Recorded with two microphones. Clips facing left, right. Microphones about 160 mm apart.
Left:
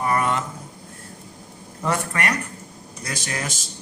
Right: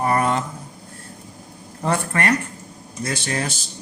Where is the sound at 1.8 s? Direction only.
30° right (ahead or behind).